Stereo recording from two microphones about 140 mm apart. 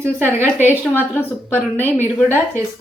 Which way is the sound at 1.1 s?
15° left (ahead or behind).